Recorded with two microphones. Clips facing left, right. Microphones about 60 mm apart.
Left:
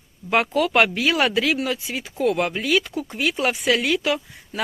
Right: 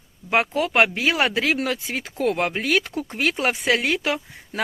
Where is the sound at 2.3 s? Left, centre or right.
Right.